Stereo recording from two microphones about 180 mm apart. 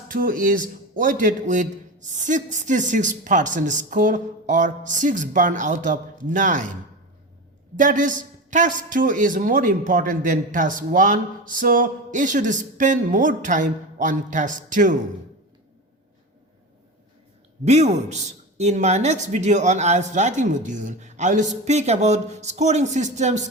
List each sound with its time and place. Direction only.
0.1 s a man's voice: 50° right (ahead or behind)
7.8 s a man's voice: 45° right (ahead or behind)
17.7 s speech: 40° right (ahead or behind)